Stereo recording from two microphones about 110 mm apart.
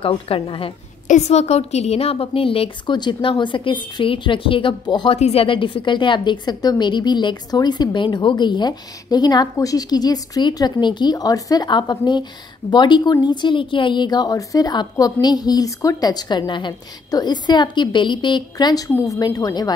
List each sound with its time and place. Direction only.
0.0 s a woman's voice: 55° left (ahead or behind)
1.1 s a woman's voice: 90° left; by 5.2 s 45° left (ahead or behind)
5.2 s a woman's voice: 60° left (ahead or behind); by 19.7 s 35° left (ahead or behind)